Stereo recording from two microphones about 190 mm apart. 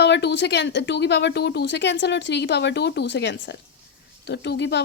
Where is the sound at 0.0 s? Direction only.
60° left (ahead or behind).